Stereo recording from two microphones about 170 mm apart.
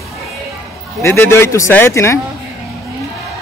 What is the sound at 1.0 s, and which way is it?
Speech, 15° left (ahead or behind).